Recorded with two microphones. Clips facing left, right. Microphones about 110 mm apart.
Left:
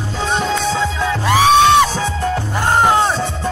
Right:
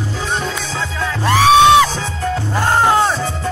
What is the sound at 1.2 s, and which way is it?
Music, 15° left (ahead or behind).